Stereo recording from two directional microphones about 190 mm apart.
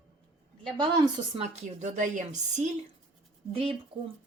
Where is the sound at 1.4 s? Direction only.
35° right (ahead or behind).